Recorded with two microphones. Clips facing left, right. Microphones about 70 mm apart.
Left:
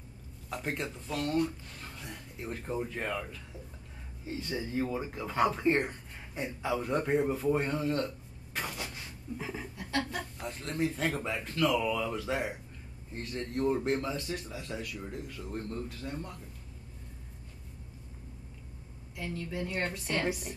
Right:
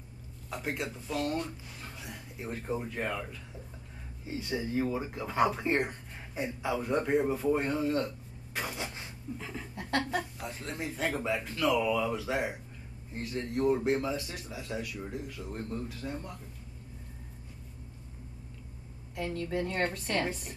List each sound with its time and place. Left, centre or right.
0.5 s speech: centre
4.4 s speech: centre
8.7 s a sound: right
9.4 s a sound: centre
9.8 s chicken: right
10.4 s speech: centre
19.1 s a woman's voice: right